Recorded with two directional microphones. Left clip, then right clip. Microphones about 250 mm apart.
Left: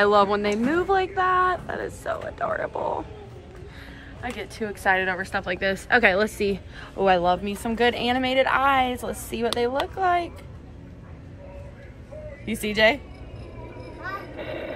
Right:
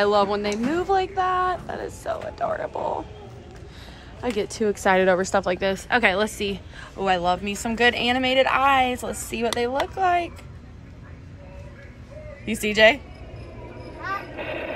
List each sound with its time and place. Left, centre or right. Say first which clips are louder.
0.0 s a woman's voice: left 1 dB; centre
4.4 s a woman's voice: right 9 dB; right; by 10.3 s centre
12.4 s a woman's voice: right 3 dB; centre
14.0 s a sound: right 4 dB; centre